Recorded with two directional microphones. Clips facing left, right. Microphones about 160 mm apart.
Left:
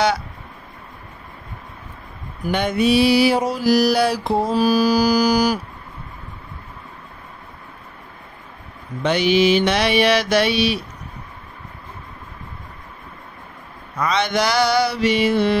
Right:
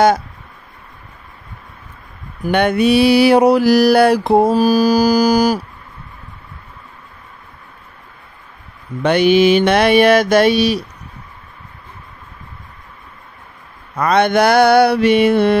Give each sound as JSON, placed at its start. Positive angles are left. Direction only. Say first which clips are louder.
{"t": 2.4, "sound": "mantra", "louder": "right 5 dB", "side_deg": -60}
{"t": 9.0, "sound": "mantra", "louder": "right 5 dB", "side_deg": -55}
{"t": 13.9, "sound": "mantra", "louder": "right 7 dB", "side_deg": -55}